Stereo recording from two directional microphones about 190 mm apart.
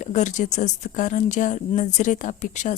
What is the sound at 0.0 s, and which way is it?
A woman's voice, 40° left (ahead or behind).